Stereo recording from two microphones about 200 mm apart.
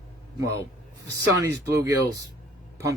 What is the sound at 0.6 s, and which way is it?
Speech, 15° right (ahead or behind).